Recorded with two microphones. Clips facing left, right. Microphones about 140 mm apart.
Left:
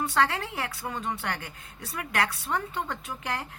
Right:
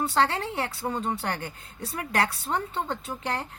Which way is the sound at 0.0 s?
30° right (ahead or behind).